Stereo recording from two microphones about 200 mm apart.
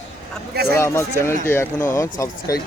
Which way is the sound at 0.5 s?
55° right (ahead or behind).